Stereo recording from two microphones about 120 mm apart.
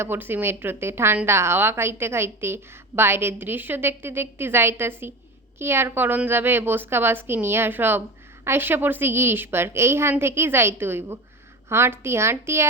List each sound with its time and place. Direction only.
0.0 s a woman's voice: 20° right (ahead or behind)